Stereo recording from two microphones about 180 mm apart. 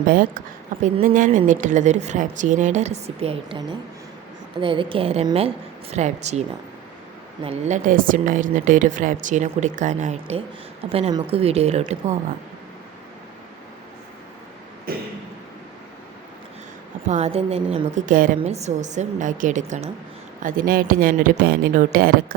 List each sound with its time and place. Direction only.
0.1 s a woman's voice: 50° right (ahead or behind); by 3.6 s 35° right (ahead or behind)
4.6 s a woman's voice: 30° right (ahead or behind)
7.4 s a woman's voice: 35° right (ahead or behind)
14.9 s a sound: 55° right (ahead or behind)
17.1 s a woman's voice: 35° right (ahead or behind)
17.9 s a woman's voice: 50° right (ahead or behind)